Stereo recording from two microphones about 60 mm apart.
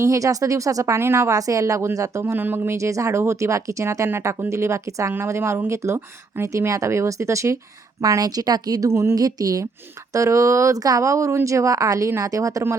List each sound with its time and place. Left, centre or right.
0.0 s speech: right
0.9 s speech: right
1.3 s speech: right
2.2 s speech: right
2.7 s speech: right
5.1 s speech: right
8.0 s speech: right
8.9 s speech: right
9.1 s speech: right
10.1 s speech: right